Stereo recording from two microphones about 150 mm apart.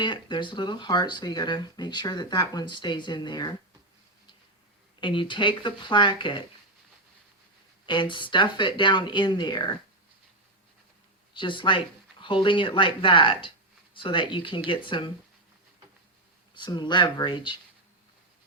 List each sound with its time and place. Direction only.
0.0 s speech: 30° left (ahead or behind)
4.9 s speech: 30° left (ahead or behind)
7.9 s speech: 30° left (ahead or behind)
11.3 s speech: 30° left (ahead or behind)
16.6 s speech: 30° left (ahead or behind)